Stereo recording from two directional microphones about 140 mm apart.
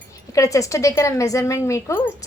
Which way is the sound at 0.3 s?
25° left (ahead or behind).